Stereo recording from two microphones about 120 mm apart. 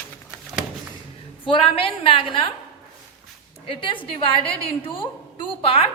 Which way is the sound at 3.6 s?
45° left (ahead or behind).